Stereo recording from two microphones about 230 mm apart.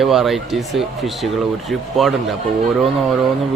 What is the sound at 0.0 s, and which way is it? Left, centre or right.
Speech, centre.